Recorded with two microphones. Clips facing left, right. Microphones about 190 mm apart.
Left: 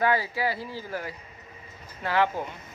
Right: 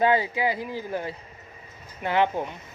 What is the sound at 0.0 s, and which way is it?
Speech, 20° right (ahead or behind).